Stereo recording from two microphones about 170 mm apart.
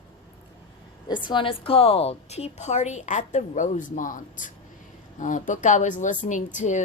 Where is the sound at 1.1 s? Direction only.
25° left (ahead or behind).